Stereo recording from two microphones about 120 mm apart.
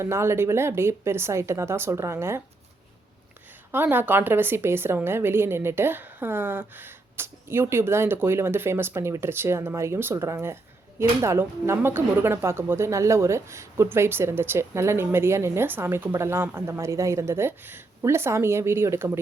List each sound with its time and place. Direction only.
0.0 s speech: 20° right (ahead or behind)
3.7 s speech: 15° right (ahead or behind)